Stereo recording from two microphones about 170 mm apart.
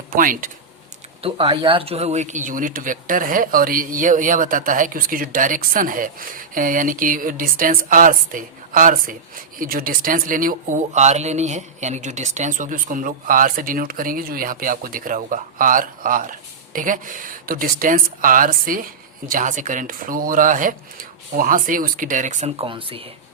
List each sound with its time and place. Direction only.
0.1 s speech: 55° right (ahead or behind)
1.2 s speech: 35° right (ahead or behind)